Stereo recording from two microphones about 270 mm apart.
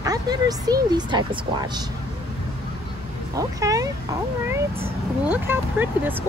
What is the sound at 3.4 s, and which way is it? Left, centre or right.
Speech, centre.